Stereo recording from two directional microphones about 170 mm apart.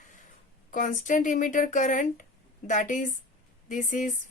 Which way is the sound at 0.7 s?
45° left (ahead or behind).